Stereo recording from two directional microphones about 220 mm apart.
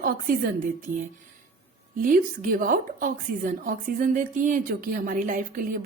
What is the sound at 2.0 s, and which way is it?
A woman's voice, 40° right (ahead or behind).